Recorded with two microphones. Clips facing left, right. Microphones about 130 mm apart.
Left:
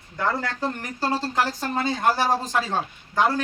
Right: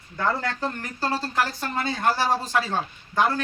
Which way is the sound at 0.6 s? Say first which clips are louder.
Left 2 dB; 15° left (ahead or behind).